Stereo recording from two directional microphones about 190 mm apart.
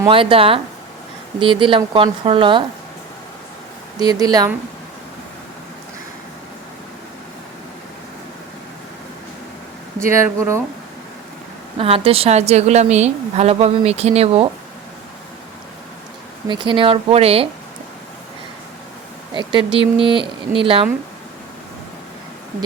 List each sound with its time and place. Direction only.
0.0 s speech: 25° right (ahead or behind)
4.0 s speech: 20° right (ahead or behind)
10.0 s speech: 15° right (ahead or behind)
11.8 s a woman's voice: 30° right (ahead or behind)
16.5 s speech: 25° right (ahead or behind)
19.3 s speech: 25° right (ahead or behind)